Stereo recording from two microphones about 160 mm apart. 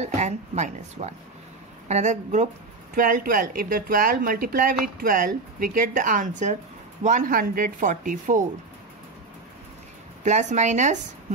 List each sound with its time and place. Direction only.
0.0 s a woman's voice: 45° right (ahead or behind)
10.2 s a woman's voice: 50° right (ahead or behind)